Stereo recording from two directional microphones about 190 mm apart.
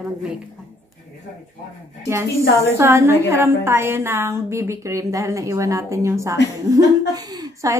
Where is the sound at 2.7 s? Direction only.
15° right (ahead or behind).